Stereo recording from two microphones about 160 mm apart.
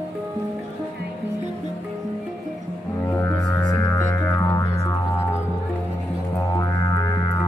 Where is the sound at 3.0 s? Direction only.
15° left (ahead or behind).